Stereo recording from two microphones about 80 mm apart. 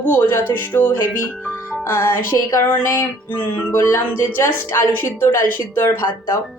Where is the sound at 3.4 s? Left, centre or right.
Left.